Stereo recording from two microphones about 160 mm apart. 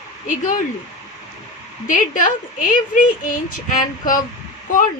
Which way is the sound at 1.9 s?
55° left (ahead or behind).